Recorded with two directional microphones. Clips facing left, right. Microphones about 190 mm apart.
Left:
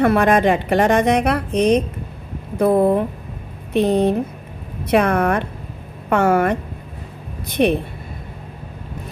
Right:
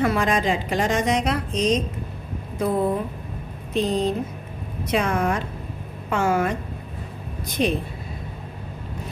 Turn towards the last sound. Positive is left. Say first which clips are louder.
# left 6 dB
turn(degrees=65)  # may be behind; listen again after turning